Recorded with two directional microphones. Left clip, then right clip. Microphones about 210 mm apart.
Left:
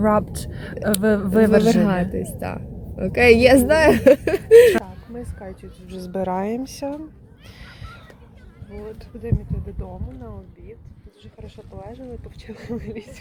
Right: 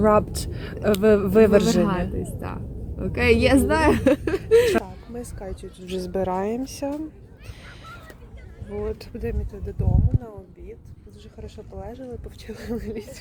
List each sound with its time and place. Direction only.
0.0 s speech: 5° right (ahead or behind)
2.1 s a woman's voice: 45° left (ahead or behind)
4.7 s speech: centre (ahead or behind)
8.8 s speech: 50° right (ahead or behind)
9.8 s speech: 5° right (ahead or behind)